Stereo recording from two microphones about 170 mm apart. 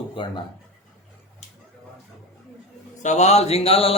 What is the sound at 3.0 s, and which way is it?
Speech, 40° left (ahead or behind).